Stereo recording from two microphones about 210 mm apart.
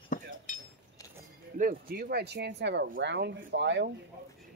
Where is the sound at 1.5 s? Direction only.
40° right (ahead or behind); by 3.9 s 60° right (ahead or behind).